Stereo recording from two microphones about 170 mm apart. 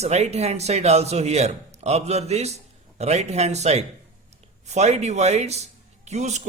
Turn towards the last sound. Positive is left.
turn(degrees=-40)  # may be behind; listen again after turning